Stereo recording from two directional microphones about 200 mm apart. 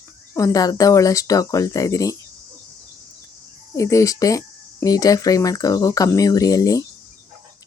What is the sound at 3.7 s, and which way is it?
Speech, 15° left (ahead or behind).